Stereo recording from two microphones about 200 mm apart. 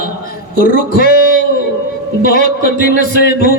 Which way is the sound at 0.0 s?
50° left (ahead or behind).